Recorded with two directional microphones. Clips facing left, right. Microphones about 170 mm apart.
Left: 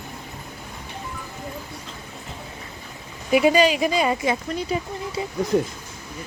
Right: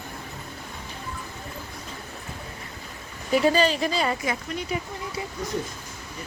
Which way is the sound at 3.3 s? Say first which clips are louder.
Left 4 dB; 10° left (ahead or behind).